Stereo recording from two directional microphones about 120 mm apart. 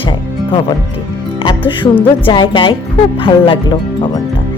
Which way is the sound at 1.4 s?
45° left (ahead or behind).